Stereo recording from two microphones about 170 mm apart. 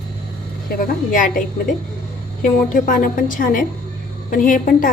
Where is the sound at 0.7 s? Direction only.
55° left (ahead or behind).